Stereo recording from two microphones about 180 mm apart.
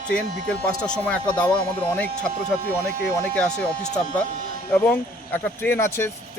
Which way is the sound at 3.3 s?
5° left (ahead or behind).